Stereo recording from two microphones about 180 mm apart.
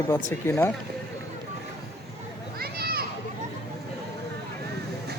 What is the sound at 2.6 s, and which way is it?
Children playing, 55° right (ahead or behind).